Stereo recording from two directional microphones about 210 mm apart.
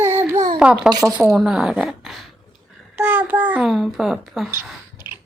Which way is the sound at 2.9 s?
5° right (ahead or behind).